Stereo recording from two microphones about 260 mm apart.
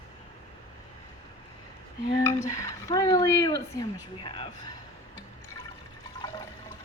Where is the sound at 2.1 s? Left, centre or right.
Centre.